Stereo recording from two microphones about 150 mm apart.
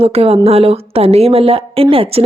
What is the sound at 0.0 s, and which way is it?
A woman's voice, 40° right (ahead or behind).